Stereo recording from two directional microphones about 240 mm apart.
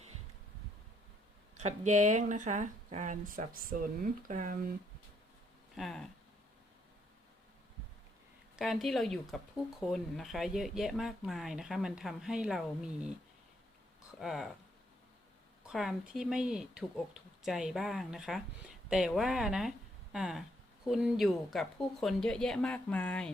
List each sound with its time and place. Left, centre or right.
1.5 s speech: right
5.7 s speech: centre
8.5 s speech: centre
14.2 s speech: centre
15.6 s speech: centre